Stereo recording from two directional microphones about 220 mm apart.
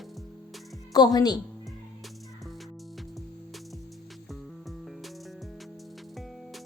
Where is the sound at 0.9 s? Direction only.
15° left (ahead or behind).